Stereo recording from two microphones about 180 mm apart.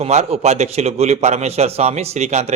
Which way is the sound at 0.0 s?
35° right (ahead or behind).